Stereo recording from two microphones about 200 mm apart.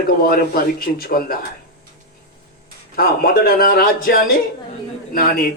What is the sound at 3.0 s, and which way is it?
A man's voice, 45° left (ahead or behind).